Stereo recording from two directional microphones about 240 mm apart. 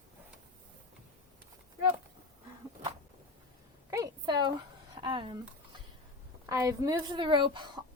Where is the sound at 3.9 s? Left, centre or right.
Centre.